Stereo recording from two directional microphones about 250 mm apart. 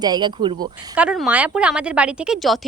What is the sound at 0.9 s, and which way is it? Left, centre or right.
A woman's voice, centre.